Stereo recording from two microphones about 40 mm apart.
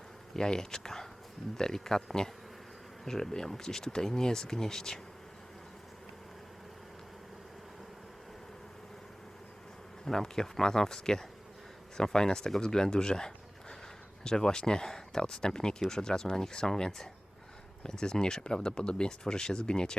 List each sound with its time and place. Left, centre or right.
0.3 s speech: centre
10.1 s speech: centre